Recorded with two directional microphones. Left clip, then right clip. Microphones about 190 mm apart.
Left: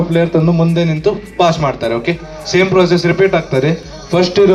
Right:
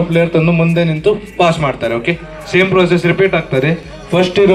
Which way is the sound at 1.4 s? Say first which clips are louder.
Left 2 dB; centre (ahead or behind).